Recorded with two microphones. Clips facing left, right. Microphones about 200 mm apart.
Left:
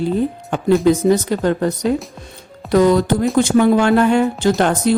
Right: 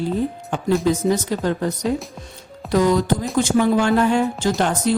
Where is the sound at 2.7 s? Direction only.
65° left (ahead or behind).